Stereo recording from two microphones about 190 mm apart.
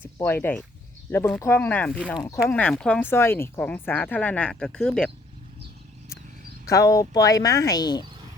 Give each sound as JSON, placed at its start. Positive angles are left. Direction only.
{"t": 0.0, "sound": "speech", "side_deg": 10}
{"t": 2.1, "sound": "speech", "side_deg": 20}
{"t": 2.5, "sound": "speech", "side_deg": 5}
{"t": 6.7, "sound": "speech", "side_deg": 15}